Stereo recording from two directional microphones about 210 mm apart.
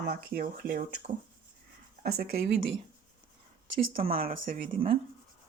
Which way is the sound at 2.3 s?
30° right (ahead or behind).